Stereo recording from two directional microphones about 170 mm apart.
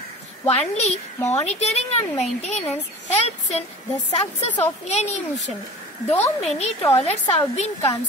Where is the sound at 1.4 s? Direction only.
40° left (ahead or behind).